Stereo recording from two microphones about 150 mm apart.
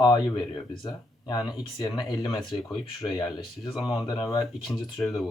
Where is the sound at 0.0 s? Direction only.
25° left (ahead or behind).